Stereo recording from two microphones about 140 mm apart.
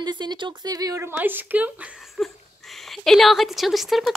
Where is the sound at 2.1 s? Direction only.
Centre (ahead or behind).